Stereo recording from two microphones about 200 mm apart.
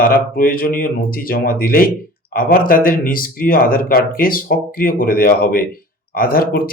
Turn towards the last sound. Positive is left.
turn(degrees=45)  # may be behind; listen again after turning